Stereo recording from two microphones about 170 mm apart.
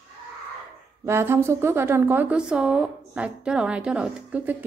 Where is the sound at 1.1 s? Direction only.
15° right (ahead or behind).